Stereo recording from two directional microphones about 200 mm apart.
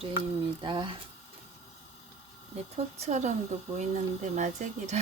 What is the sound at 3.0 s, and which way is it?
Speech, 35° right (ahead or behind).